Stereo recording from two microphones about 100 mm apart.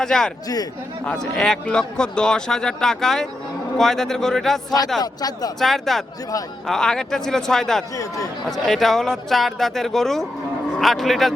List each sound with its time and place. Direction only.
0.0 s speech: 5° left (ahead or behind)
0.4 s speech: 40° left (ahead or behind)
1.2 s speech: 5° left (ahead or behind)
4.9 s speech: 40° left (ahead or behind)
5.5 s speech: centre (ahead or behind)
7.9 s speech: 35° left (ahead or behind)
8.4 s speech: centre (ahead or behind)